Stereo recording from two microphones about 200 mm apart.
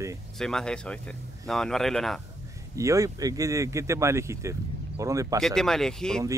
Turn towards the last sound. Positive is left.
turn(degrees=5)  # may be behind; listen again after turning